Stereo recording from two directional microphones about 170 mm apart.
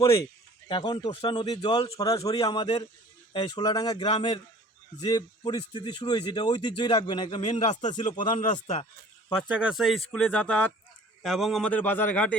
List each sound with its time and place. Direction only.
0.7 s speech: 25° left (ahead or behind)
7.4 s speech: 40° left (ahead or behind)
9.6 s a man's voice: 5° right (ahead or behind)